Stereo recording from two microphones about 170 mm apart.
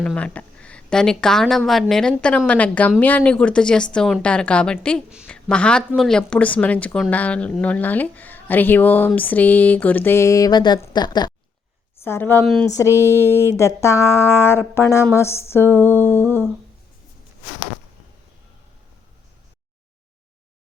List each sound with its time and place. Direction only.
0.0 s speech: 5° left (ahead or behind); by 11.3 s 25° left (ahead or behind)
12.0 s speech: 15° left (ahead or behind)